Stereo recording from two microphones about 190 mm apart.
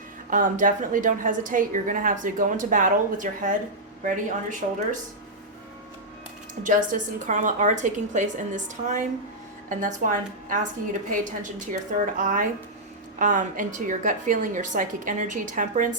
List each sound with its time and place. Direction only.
0.3 s a woman's voice: 45° right (ahead or behind)
6.6 s a woman's voice: 45° right (ahead or behind)